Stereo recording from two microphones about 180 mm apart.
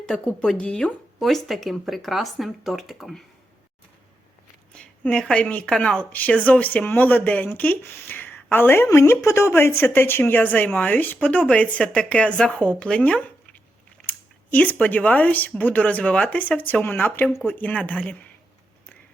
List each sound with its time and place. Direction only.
0.1 s speech: 5° left (ahead or behind)
4.7 s speech: 5° left (ahead or behind)